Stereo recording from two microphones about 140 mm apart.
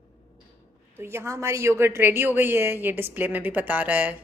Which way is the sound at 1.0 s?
20° right (ahead or behind).